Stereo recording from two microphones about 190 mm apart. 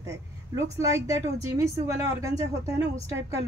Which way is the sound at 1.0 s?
15° right (ahead or behind).